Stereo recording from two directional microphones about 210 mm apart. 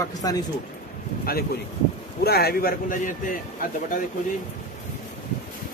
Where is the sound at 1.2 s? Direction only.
45° left (ahead or behind).